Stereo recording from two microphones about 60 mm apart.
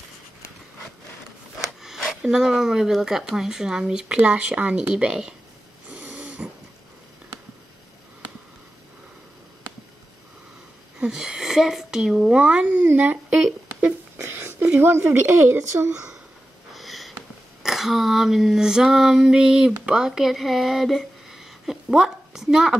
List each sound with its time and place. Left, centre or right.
1.8 s speech: centre
5.9 s snoring: right
11.0 s speech: centre; by 13.4 s right
14.2 s speech: right
15.9 s speech: centre
16.7 s sniff: centre
17.6 s female singing: centre
19.9 s speech: centre